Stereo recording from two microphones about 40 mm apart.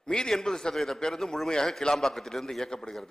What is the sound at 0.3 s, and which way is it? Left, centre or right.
A man's voice, centre.